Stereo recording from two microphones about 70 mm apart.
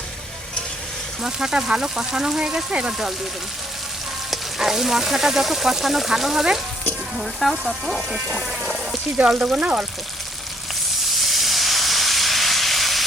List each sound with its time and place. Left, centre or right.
1.2 s speech: centre
4.3 s frying: centre
9.1 s speech: centre
11.1 s steam: centre